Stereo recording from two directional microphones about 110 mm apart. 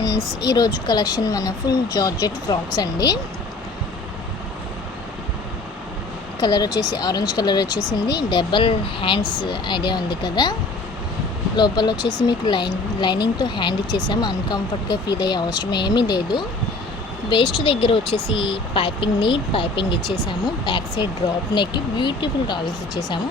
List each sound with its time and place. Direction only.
0.4 s speech: 35° left (ahead or behind)
6.4 s speech: 40° left (ahead or behind)
11.5 s speech: 40° left (ahead or behind)